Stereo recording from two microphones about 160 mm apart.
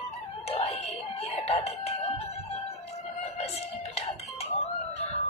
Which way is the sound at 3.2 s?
40° left (ahead or behind).